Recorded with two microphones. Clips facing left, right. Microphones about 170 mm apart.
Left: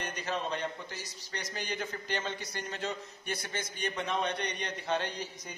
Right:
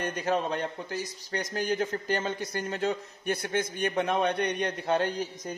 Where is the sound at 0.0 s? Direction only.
50° right (ahead or behind).